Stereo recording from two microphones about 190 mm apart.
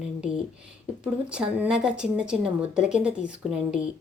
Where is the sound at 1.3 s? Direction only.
5° right (ahead or behind).